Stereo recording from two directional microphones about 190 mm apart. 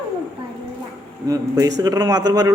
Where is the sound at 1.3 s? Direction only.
20° right (ahead or behind).